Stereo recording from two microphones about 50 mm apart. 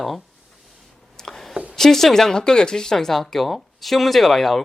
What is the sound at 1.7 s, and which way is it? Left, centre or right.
Speech, centre.